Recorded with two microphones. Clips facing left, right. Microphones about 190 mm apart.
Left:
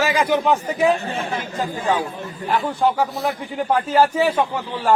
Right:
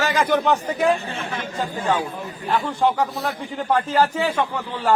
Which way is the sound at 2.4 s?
5° left (ahead or behind).